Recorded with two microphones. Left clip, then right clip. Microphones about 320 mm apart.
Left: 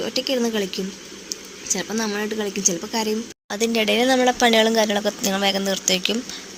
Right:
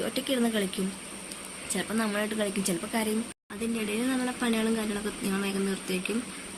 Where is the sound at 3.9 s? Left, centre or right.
Left.